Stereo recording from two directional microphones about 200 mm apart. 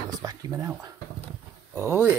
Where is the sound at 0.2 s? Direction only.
15° right (ahead or behind).